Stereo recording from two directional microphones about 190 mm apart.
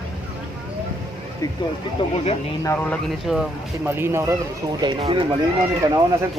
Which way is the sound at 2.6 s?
10° left (ahead or behind).